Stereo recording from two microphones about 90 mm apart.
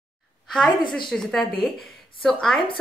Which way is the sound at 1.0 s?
5° left (ahead or behind).